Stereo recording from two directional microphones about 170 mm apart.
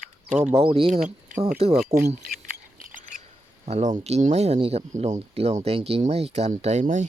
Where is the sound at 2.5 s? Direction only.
55° right (ahead or behind).